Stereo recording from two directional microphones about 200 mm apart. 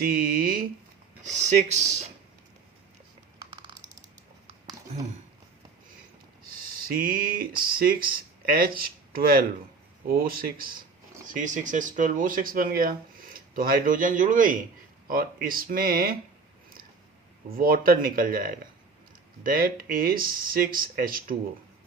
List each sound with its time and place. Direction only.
0.0 s speech: 45° right (ahead or behind)
1.2 s speech: 35° right (ahead or behind)
6.9 s speech: 45° right (ahead or behind)
17.6 s speech: 45° right (ahead or behind)